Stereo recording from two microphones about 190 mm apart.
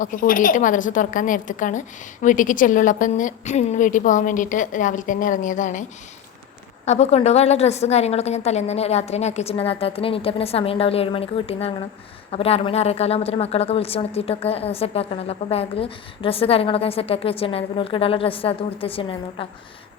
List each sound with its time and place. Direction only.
0.0 s a woman's voice: 45° left (ahead or behind)
6.8 s a woman's voice: 35° left (ahead or behind)